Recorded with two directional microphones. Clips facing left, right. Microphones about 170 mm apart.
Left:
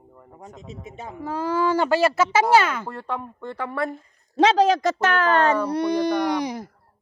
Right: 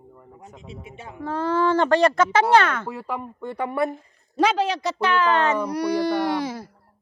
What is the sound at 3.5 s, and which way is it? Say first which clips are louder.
Speech: right 3 dB; 20° right (ahead or behind).